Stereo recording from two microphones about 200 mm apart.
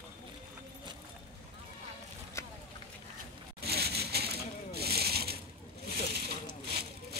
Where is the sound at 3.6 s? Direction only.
55° right (ahead or behind).